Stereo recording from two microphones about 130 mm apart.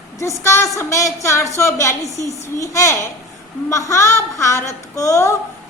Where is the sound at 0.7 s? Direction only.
25° left (ahead or behind).